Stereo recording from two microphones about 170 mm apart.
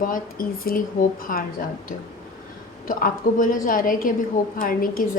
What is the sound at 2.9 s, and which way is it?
A woman's voice, 55° left (ahead or behind).